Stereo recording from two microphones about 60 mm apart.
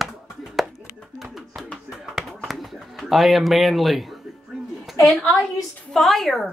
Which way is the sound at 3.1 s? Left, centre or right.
Centre.